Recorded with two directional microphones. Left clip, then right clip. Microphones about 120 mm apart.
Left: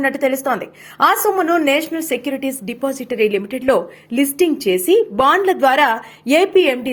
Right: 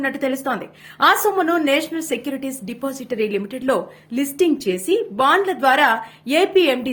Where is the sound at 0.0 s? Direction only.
35° left (ahead or behind).